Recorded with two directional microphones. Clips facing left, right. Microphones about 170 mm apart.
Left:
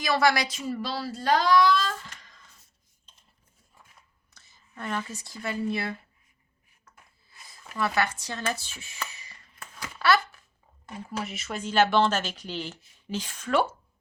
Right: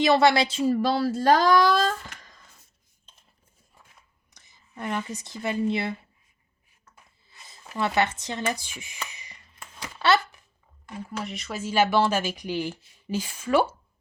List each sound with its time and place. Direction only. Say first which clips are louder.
0.0 s a woman's voice: right 5 dB; 25° right (ahead or behind)
0.8 s speech: right 9 dB; 50° right (ahead or behind)
4.4 s speech: right 3 dB; 15° right (ahead or behind)
7.3 s speech: right 1 dB; 25° right (ahead or behind)
9.8 s a sound: right 1 dB; 25° right (ahead or behind)
11.1 s a woman's voice: even; centre (ahead or behind)